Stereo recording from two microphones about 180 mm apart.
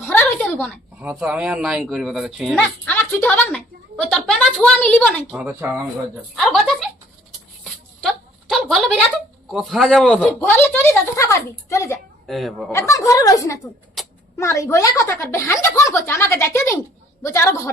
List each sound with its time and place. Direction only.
0.0 s a sound: 10° left (ahead or behind)
1.0 s speech: 5° right (ahead or behind)
2.6 s a woman's voice: 10° left (ahead or behind)
5.4 s dishes: 10° right (ahead or behind)
6.3 s speech: 5° left (ahead or behind)
7.6 s a sound: centre (ahead or behind)
9.5 s speech: centre (ahead or behind); by 11.9 s 15° left (ahead or behind)
12.2 s speech: centre (ahead or behind)
12.7 s speech: 15° left (ahead or behind)
14.0 s a sound: centre (ahead or behind)
14.3 s speech: 15° left (ahead or behind)